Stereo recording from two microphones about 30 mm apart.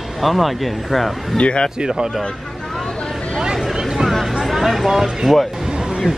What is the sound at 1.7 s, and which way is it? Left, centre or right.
Speech, right.